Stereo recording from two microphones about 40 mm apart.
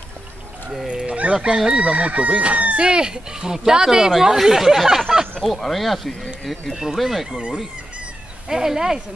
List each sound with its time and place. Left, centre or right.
0.8 s a sound: right
1.8 s chicken: right
2.9 s speech: centre
5.4 s speech: centre
8.5 s speech: centre